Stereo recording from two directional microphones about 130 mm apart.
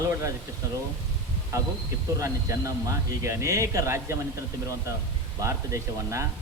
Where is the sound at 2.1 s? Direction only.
25° right (ahead or behind).